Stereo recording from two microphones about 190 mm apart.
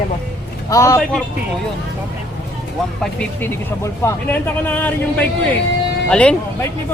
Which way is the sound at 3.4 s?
10° left (ahead or behind).